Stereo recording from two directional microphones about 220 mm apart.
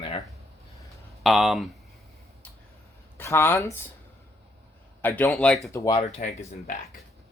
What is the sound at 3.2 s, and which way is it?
Speech, 10° left (ahead or behind).